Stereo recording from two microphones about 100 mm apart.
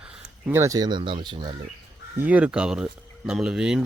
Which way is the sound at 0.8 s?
50° right (ahead or behind).